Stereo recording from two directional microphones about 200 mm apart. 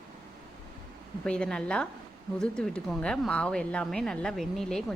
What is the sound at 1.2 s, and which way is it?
A woman's voice, 5° left (ahead or behind).